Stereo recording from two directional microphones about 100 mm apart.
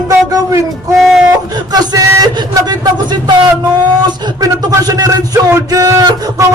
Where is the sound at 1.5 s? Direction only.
40° right (ahead or behind).